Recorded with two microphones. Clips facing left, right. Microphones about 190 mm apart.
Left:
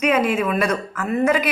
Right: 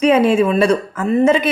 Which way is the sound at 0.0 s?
30° right (ahead or behind).